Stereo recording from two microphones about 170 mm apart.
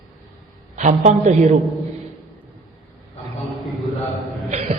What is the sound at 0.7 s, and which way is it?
Speech, 45° right (ahead or behind).